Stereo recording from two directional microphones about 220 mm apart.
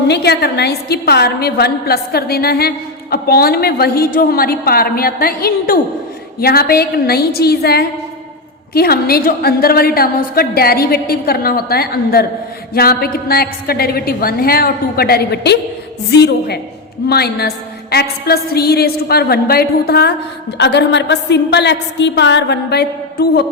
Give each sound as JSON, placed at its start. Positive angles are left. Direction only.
{"t": 0.1, "sound": "a woman's voice", "side_deg": 45}